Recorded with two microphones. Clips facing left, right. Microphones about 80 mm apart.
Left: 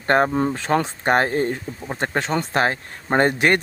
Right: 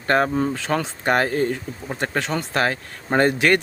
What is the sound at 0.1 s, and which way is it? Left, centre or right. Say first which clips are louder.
Speech: left 1 dB; left.